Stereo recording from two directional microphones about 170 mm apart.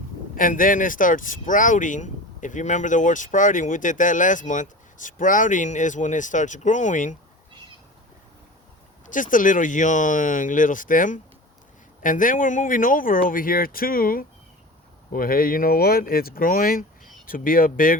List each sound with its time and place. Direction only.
0.3 s speech: 55° left (ahead or behind)
9.0 s speech: 50° left (ahead or behind)